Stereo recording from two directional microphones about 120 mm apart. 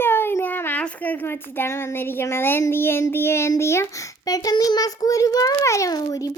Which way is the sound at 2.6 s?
20° left (ahead or behind).